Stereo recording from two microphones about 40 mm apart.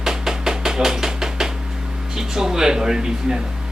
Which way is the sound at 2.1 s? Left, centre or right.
Centre.